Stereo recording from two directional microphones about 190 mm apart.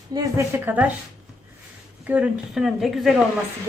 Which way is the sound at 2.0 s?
5° right (ahead or behind).